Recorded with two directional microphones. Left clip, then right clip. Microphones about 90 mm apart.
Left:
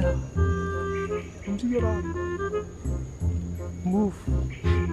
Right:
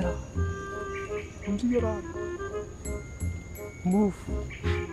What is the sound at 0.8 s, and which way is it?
Music, 20° right (ahead or behind).